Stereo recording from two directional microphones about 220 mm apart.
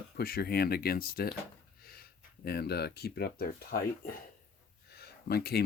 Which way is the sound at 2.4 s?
45° left (ahead or behind).